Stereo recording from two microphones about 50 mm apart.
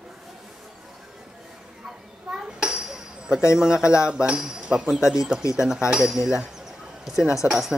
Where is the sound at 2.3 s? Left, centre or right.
Centre.